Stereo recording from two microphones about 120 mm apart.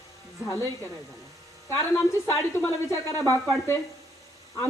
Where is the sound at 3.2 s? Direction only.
30° right (ahead or behind).